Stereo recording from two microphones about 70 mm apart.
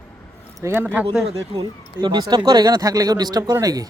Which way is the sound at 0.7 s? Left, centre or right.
Right.